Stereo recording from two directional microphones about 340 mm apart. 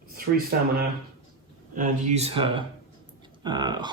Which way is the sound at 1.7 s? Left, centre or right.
Right.